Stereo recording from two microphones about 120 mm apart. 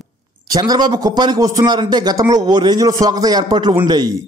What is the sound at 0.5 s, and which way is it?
A man's voice, 35° right (ahead or behind).